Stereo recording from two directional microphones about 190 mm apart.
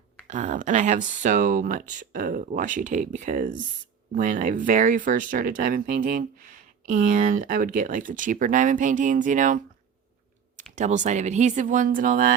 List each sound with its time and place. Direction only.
0.3 s speech: 40° right (ahead or behind)
10.6 s speech: 40° right (ahead or behind)